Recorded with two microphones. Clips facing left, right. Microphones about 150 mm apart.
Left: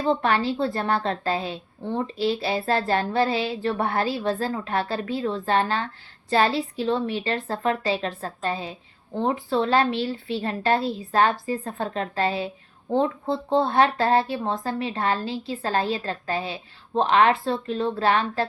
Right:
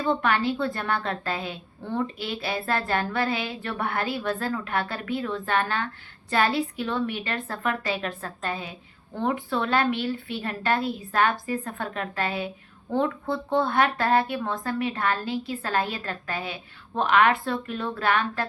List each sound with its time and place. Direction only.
0.0 s a woman's voice: 30° left (ahead or behind)